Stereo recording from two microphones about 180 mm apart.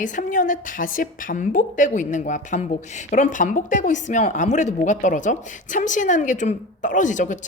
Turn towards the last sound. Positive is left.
turn(degrees=45)  # may be behind; listen again after turning